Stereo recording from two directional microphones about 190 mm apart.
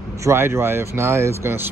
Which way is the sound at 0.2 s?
15° right (ahead or behind).